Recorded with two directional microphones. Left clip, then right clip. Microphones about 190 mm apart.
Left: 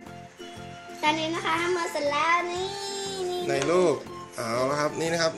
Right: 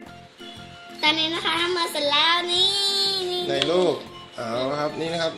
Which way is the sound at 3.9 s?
20° left (ahead or behind).